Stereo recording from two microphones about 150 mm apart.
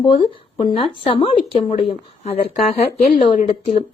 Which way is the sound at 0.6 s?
35° left (ahead or behind).